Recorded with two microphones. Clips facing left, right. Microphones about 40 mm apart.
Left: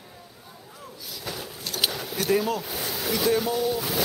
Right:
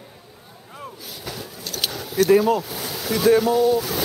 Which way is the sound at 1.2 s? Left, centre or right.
Centre.